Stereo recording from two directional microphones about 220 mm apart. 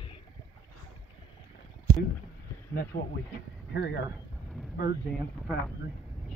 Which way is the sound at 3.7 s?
50° left (ahead or behind).